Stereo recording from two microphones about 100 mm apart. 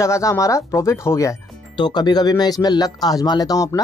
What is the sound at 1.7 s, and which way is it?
Speech, 50° left (ahead or behind).